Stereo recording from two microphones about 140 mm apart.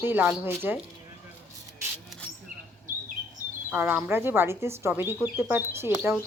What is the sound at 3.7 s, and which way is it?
Speech, 10° right (ahead or behind).